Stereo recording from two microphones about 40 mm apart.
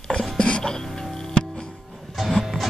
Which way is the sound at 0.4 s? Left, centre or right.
Left.